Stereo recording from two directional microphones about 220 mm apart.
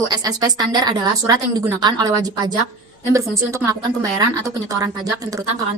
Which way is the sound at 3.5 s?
15° right (ahead or behind).